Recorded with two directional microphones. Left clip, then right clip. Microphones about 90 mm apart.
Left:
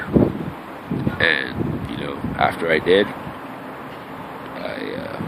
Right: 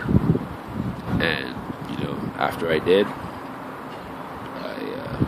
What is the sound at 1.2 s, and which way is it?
Wind noise, 25° right (ahead or behind).